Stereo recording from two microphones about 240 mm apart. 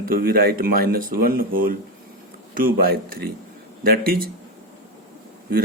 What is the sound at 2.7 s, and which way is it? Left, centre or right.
Speech, right.